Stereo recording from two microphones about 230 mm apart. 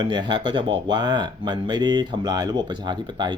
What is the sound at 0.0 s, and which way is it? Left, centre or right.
Speech, centre.